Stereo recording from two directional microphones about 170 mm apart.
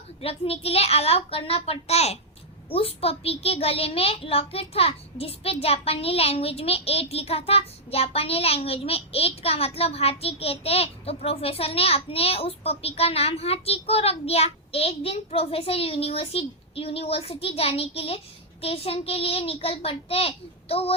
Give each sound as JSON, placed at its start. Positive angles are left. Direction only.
{"t": 0.2, "sound": "a child's voice", "side_deg": 35}